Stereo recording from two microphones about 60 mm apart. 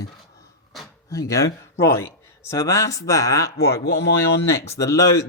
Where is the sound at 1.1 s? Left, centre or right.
Left.